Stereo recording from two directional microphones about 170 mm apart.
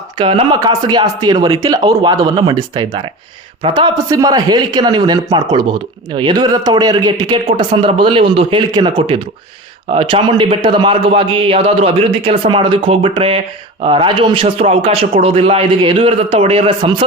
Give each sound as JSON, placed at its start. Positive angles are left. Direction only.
{"t": 0.2, "sound": "a man's voice", "side_deg": -30}